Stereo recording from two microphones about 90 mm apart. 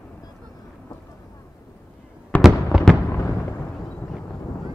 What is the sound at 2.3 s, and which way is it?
Fireworks, 15° left (ahead or behind).